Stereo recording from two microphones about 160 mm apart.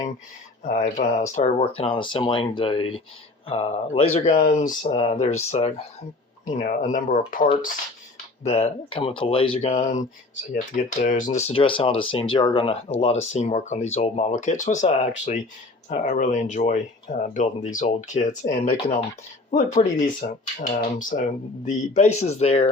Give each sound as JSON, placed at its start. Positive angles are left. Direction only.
{"t": 0.6, "sound": "speech", "side_deg": 55}
{"t": 4.4, "sound": "speech", "side_deg": 55}
{"t": 8.4, "sound": "speech", "side_deg": 40}
{"t": 20.2, "sound": "speech", "side_deg": 55}